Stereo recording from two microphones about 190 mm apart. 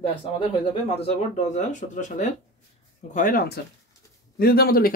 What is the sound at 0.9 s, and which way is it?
Speech, 35° left (ahead or behind).